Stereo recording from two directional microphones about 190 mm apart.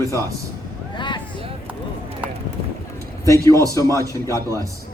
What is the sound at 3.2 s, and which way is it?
Speech, 15° left (ahead or behind).